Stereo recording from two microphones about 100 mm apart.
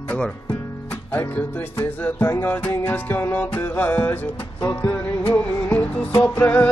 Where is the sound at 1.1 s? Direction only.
20° left (ahead or behind).